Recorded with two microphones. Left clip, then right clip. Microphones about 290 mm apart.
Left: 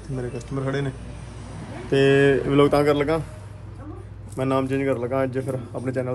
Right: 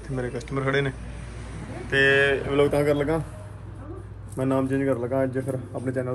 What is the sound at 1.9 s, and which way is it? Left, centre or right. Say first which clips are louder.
Speech: left 2 dB; left.